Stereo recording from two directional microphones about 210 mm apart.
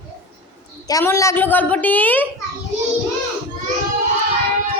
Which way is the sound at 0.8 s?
15° left (ahead or behind).